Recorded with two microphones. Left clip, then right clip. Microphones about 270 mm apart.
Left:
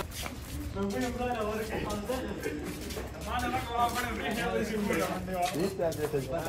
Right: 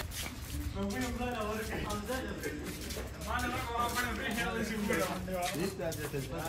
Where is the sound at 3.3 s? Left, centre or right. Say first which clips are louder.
Left 3 dB; centre.